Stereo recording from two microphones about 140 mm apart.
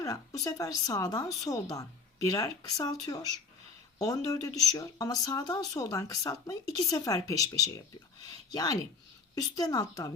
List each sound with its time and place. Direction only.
0.0 s speech: 25° left (ahead or behind)